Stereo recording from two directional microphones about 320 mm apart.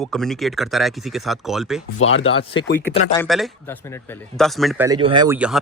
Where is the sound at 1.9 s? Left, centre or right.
Left.